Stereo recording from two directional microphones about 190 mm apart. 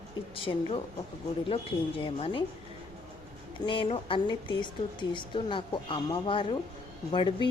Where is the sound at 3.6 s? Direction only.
25° left (ahead or behind).